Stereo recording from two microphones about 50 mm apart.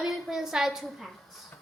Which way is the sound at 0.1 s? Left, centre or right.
Centre.